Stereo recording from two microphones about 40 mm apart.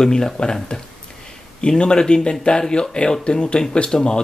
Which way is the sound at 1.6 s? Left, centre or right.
Left.